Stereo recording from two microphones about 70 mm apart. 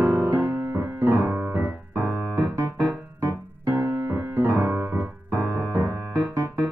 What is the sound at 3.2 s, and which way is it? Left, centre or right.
Piano, right.